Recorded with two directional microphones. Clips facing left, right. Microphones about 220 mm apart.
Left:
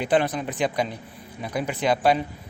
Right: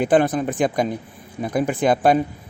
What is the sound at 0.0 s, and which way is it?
Speech, 50° right (ahead or behind).